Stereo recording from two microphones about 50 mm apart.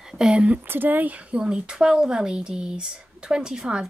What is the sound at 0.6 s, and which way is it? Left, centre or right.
Speech, right.